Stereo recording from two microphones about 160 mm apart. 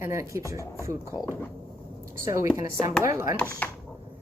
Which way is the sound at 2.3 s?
20° right (ahead or behind).